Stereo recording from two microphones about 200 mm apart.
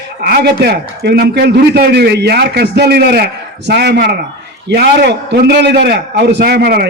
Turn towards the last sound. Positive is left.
turn(degrees=-50)  # may be behind; listen again after turning